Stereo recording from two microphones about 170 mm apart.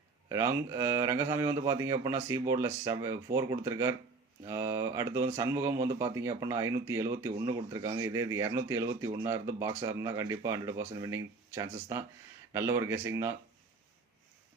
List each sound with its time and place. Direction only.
0.3 s speech: 15° right (ahead or behind)